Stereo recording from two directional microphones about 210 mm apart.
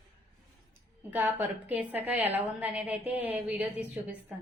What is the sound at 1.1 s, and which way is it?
A woman's voice, 10° right (ahead or behind).